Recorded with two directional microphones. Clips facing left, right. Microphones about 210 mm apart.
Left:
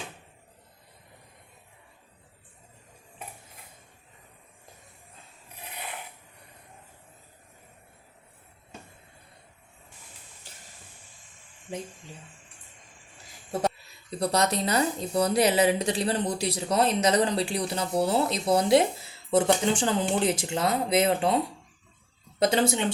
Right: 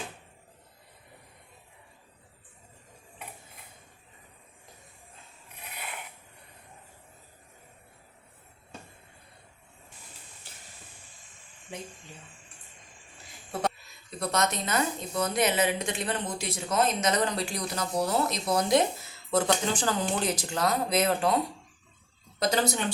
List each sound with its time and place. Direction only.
13.5 s speech: 35° left (ahead or behind)